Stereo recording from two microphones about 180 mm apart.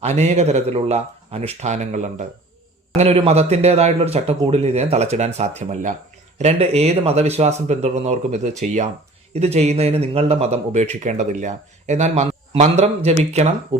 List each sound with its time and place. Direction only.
0.0 s speech: 40° right (ahead or behind)